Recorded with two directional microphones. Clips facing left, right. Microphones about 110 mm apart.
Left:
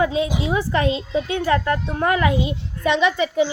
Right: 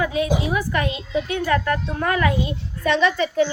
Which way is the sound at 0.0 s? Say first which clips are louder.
Left 1 dB; 25° left (ahead or behind).